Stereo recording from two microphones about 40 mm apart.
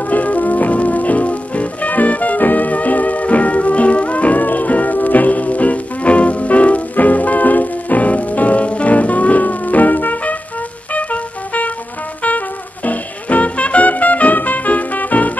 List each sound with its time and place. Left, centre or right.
0.0 s music: left